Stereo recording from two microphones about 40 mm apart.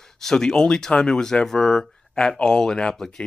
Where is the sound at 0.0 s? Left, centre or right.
Centre.